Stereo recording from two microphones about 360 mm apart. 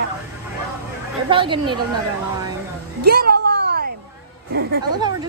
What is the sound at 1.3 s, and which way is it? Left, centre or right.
Speech, centre.